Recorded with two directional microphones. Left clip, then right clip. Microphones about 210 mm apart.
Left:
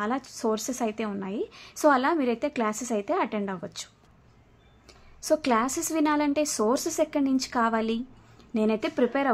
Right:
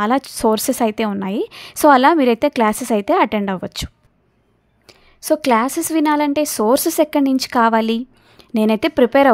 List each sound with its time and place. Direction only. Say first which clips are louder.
0.0 s a woman's voice: right 12 dB; 40° right (ahead or behind)